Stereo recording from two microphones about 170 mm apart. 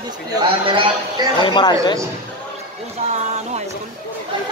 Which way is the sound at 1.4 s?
25° left (ahead or behind).